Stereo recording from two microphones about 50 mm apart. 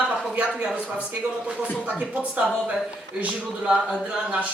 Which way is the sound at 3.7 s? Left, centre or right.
Centre.